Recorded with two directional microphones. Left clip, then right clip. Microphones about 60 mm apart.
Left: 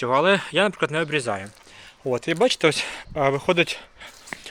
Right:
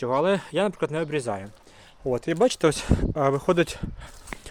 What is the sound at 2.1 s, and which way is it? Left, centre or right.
Speech, right.